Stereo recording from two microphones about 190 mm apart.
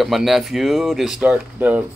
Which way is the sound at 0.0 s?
Centre (ahead or behind).